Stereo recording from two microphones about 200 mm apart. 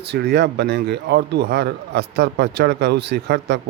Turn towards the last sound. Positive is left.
turn(degrees=-60)  # may be behind; listen again after turning